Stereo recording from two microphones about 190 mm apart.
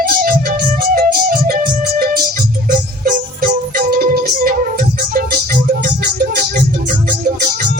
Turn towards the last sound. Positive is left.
turn(degrees=-45)  # may be behind; listen again after turning